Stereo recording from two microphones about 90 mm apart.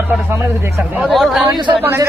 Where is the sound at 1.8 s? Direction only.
25° right (ahead or behind).